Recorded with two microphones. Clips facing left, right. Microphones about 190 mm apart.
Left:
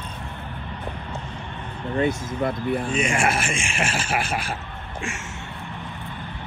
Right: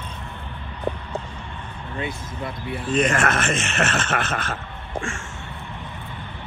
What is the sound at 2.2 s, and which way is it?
Speech, 50° left (ahead or behind).